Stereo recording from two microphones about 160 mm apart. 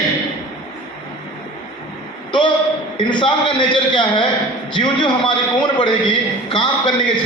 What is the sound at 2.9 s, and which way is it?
A man's voice, 30° left (ahead or behind).